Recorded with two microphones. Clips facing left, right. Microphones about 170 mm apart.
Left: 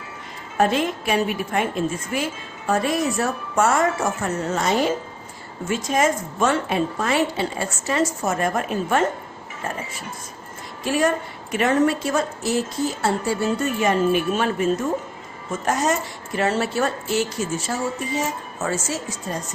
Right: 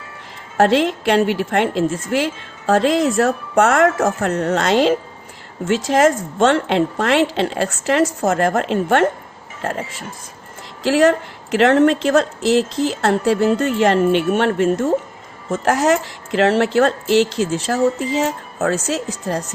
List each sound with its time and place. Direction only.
0.5 s a woman's voice: 80° right
10.8 s a woman's voice: 85° right